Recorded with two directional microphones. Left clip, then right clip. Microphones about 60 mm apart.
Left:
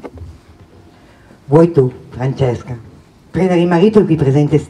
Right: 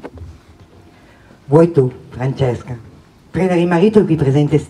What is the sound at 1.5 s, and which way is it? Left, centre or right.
Speech, centre.